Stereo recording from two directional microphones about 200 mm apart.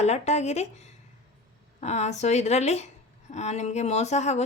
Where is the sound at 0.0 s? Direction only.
35° left (ahead or behind).